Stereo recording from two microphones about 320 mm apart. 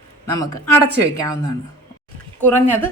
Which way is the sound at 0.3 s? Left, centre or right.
Centre.